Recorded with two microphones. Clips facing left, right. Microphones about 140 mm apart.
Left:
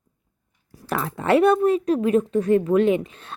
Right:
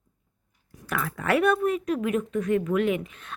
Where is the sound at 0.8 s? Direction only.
30° left (ahead or behind).